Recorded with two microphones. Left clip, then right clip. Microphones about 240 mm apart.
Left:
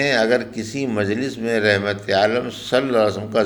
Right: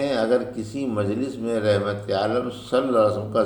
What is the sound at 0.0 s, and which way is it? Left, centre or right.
A man's voice, left.